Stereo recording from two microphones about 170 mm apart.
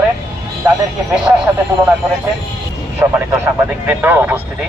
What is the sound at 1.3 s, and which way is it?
Speech, 15° right (ahead or behind).